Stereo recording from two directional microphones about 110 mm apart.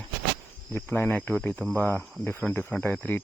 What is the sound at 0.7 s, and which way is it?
Speech, 20° left (ahead or behind).